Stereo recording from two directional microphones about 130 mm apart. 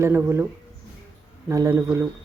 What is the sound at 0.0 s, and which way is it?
Speech, 20° right (ahead or behind).